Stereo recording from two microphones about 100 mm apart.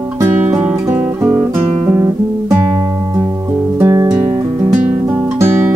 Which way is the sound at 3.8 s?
25° right (ahead or behind).